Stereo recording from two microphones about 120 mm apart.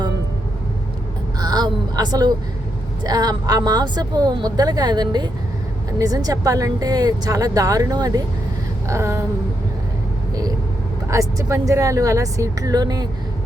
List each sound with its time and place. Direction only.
1.4 s vehicle: 35° right (ahead or behind)
3.0 s speech: 35° right (ahead or behind)
11.1 s speech: 25° right (ahead or behind)